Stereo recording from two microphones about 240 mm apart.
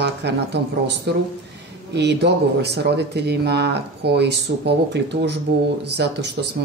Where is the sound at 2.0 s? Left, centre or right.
Right.